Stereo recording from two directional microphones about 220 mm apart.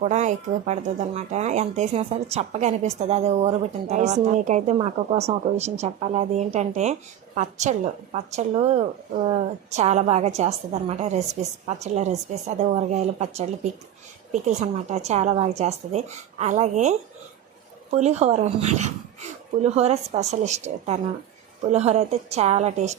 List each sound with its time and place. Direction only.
0.0 s a woman's voice: 30° right (ahead or behind)